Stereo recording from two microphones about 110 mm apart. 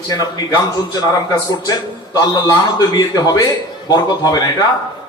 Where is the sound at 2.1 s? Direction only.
40° left (ahead or behind).